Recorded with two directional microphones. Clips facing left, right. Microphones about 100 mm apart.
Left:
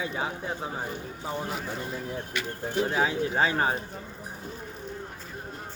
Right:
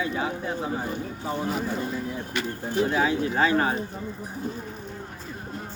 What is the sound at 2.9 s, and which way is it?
Speech, 20° left (ahead or behind).